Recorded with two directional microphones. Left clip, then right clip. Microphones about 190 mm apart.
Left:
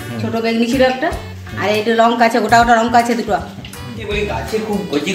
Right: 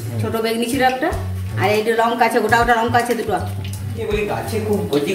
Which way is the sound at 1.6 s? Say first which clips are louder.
Left 3 dB; 45° left (ahead or behind).